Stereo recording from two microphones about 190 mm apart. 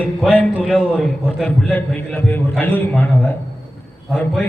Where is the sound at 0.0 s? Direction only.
5° left (ahead or behind).